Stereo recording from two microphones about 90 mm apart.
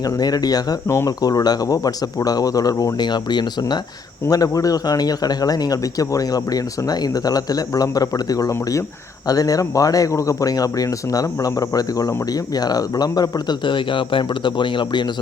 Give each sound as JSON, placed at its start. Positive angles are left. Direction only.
{"t": 0.2, "sound": "speech", "side_deg": 45}
{"t": 3.0, "sound": "speech", "side_deg": 55}
{"t": 4.3, "sound": "speech", "side_deg": 40}